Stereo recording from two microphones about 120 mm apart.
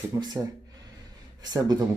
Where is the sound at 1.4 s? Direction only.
35° right (ahead or behind).